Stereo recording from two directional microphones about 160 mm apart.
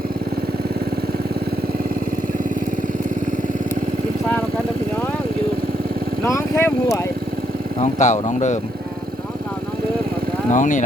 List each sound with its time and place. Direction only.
6.2 s vehicle: 15° left (ahead or behind)
7.8 s speech: 50° left (ahead or behind)
10.5 s speech: 50° left (ahead or behind)